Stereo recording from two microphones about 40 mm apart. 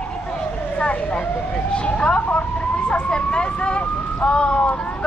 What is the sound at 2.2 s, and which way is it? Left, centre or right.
Emergency vehicle, left.